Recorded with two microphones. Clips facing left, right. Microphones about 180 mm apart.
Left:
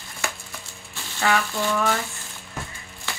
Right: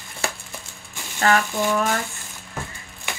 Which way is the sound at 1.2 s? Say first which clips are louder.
Right 3 dB; 45° right (ahead or behind).